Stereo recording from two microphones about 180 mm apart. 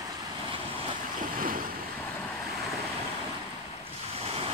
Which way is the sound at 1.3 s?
50° right (ahead or behind).